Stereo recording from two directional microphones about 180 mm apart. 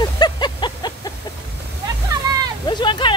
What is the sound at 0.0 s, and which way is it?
Vehicle, 25° left (ahead or behind).